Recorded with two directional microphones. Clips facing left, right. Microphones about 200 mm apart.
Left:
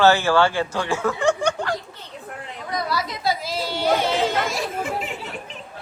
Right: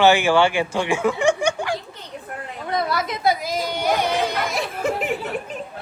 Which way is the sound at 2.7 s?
25° right (ahead or behind).